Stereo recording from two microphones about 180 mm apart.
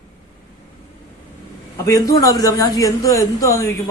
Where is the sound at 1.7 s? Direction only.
15° left (ahead or behind).